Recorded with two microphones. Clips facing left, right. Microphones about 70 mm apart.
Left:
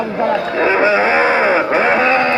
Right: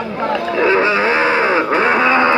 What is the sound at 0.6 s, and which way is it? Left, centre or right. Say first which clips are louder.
Livestock: even; left.